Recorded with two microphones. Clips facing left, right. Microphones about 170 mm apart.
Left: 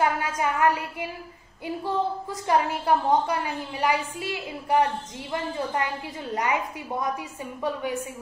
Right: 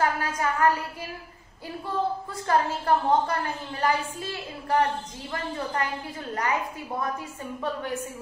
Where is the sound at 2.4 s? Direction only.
15° left (ahead or behind).